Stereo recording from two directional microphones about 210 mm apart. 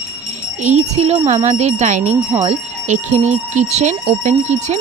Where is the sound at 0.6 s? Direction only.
30° right (ahead or behind).